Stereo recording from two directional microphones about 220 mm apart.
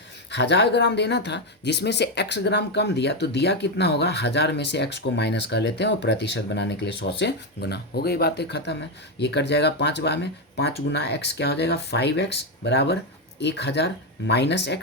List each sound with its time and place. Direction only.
0.3 s speech: 50° left (ahead or behind)